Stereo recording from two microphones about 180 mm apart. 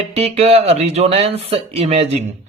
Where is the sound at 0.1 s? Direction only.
35° right (ahead or behind).